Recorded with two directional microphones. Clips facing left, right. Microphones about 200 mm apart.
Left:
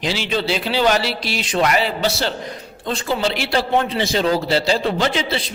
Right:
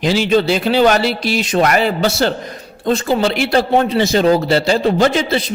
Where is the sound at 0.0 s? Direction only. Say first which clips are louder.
Right 8 dB; 45° right (ahead or behind).